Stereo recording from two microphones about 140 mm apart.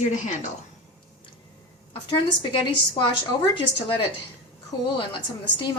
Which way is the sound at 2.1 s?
35° left (ahead or behind).